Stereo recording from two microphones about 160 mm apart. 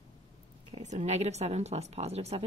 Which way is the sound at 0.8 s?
45° right (ahead or behind).